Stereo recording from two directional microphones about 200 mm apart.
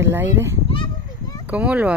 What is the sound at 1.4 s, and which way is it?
Speech, 5° right (ahead or behind).